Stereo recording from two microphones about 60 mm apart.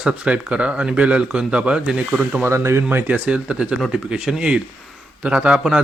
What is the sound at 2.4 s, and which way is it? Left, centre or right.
Speech, right.